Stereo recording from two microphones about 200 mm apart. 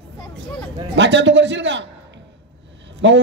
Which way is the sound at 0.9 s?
65° right (ahead or behind).